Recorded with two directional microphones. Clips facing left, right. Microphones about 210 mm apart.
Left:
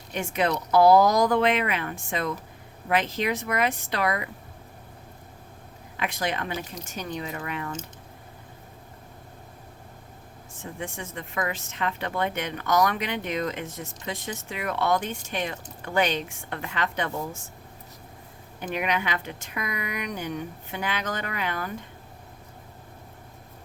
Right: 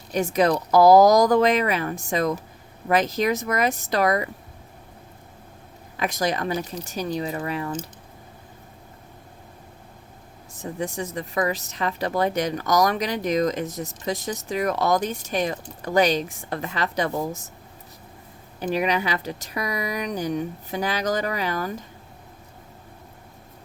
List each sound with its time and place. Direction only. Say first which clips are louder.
0.1 s speech: right 6 dB; 40° right (ahead or behind)
6.0 s speech: right 5 dB; 40° right (ahead or behind)
10.5 s speech: right 6 dB; 40° right (ahead or behind)
18.6 s speech: right 5 dB; 35° right (ahead or behind)